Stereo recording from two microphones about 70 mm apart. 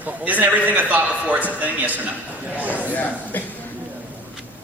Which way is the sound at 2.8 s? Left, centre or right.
Left.